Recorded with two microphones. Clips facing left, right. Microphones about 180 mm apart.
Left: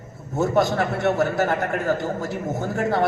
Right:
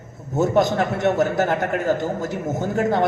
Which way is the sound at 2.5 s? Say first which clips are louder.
Right 3 dB; 20° right (ahead or behind).